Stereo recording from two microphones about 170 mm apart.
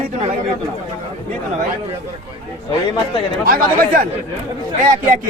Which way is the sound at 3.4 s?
60° right (ahead or behind).